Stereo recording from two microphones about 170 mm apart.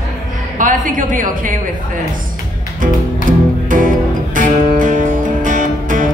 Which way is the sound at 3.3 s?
50° right (ahead or behind).